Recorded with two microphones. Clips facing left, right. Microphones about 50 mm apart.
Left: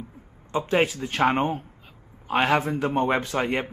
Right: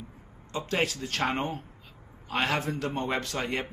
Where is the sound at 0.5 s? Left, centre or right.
Left.